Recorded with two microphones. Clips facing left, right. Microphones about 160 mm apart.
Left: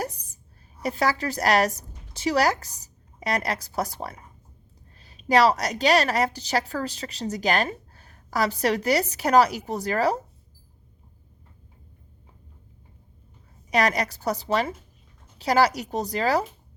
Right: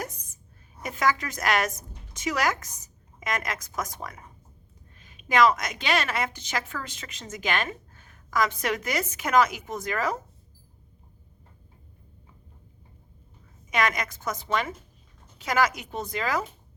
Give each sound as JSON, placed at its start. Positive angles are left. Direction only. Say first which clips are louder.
{"t": 0.0, "sound": "a sound", "louder": "left 5 dB", "side_deg": 35}
{"t": 0.8, "sound": "a woman's voice", "louder": "left 2 dB", "side_deg": 35}
{"t": 13.7, "sound": "a woman's voice", "louder": "left 4 dB", "side_deg": 35}